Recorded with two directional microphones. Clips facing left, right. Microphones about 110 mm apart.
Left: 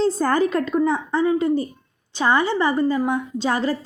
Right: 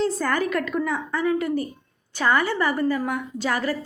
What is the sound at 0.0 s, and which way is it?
A woman's voice, 30° left (ahead or behind).